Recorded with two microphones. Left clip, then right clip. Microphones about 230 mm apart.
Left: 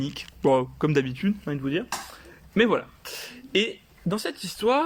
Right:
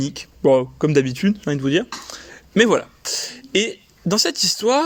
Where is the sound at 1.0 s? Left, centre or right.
Right.